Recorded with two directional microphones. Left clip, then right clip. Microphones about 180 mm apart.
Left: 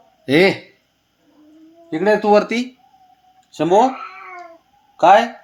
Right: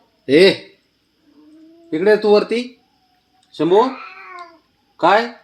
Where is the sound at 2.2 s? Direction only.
55° left (ahead or behind).